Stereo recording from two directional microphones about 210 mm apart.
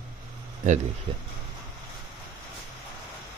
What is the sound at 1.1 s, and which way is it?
Speech, 25° right (ahead or behind).